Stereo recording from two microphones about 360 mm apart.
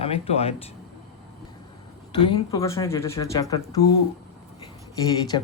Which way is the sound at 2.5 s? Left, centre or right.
Centre.